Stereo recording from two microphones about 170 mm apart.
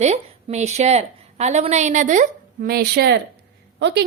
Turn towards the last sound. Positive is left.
turn(degrees=-90)